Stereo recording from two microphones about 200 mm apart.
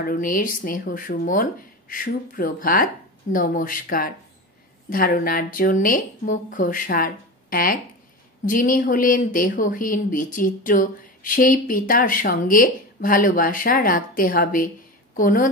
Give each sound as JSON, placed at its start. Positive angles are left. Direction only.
{"t": 0.0, "sound": "speech", "side_deg": 45}